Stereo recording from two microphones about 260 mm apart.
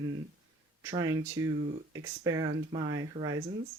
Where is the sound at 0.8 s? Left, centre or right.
Centre.